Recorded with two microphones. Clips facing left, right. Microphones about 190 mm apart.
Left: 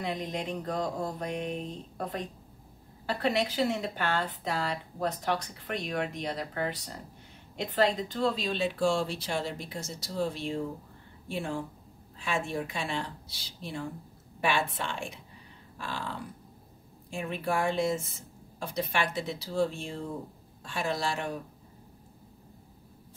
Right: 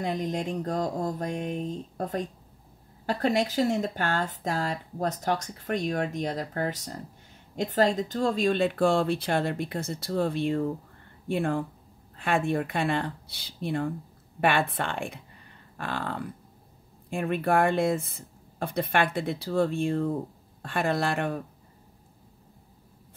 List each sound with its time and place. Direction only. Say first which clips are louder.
0.0 s speech: right 4 dB; 45° right (ahead or behind)